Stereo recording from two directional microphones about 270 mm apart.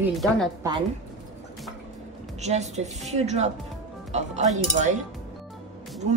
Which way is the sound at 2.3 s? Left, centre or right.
Right.